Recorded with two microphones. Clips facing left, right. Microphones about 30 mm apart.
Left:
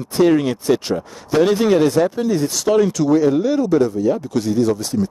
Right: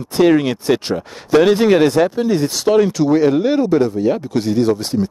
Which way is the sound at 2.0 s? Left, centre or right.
Right.